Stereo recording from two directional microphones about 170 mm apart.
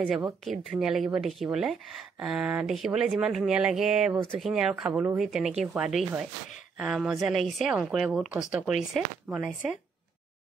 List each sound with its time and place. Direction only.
0.0 s speech: centre (ahead or behind)